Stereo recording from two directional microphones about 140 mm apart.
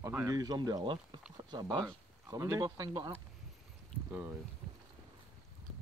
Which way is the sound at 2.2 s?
20° right (ahead or behind).